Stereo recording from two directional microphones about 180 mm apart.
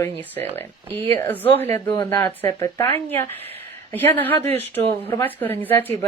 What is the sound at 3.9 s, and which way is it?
Speech, 10° left (ahead or behind).